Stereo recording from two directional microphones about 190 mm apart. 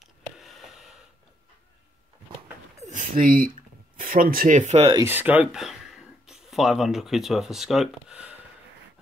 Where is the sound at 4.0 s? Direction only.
45° right (ahead or behind).